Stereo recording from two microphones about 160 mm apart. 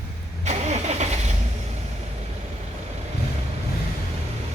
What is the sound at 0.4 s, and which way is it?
Vehicle, 45° right (ahead or behind).